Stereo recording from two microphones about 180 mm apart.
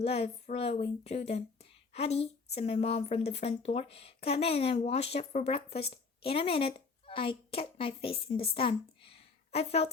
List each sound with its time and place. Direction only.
0.0 s a woman's voice: 35° left (ahead or behind)